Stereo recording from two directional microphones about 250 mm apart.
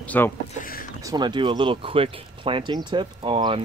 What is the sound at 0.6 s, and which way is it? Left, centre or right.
Speech, left.